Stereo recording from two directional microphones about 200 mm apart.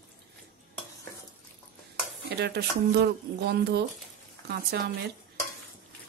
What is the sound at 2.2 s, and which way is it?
A woman's voice, 55° right (ahead or behind).